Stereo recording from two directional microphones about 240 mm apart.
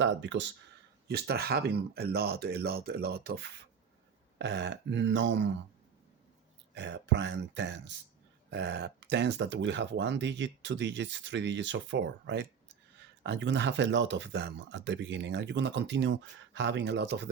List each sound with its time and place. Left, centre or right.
0.0 s speech: right
6.7 s speech: right